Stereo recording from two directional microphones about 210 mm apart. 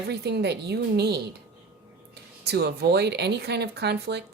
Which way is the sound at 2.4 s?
50° right (ahead or behind).